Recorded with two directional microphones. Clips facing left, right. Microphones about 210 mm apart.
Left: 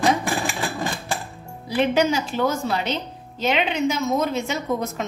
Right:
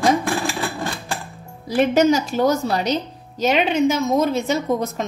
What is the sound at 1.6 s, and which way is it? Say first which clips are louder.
A woman's voice: right 4 dB; 40° right (ahead or behind).